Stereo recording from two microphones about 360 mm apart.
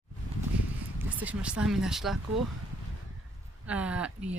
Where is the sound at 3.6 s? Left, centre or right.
Centre.